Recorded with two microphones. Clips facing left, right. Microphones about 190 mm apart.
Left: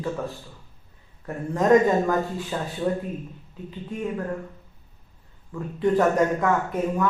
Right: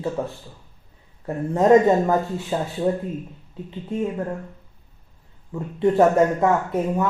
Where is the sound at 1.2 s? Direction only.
25° right (ahead or behind).